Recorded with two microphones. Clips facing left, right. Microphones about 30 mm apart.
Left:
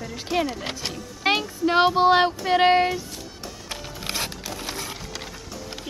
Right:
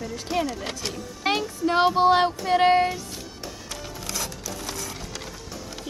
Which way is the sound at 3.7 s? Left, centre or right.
Left.